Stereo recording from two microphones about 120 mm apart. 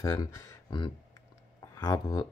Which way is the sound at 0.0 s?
25° left (ahead or behind).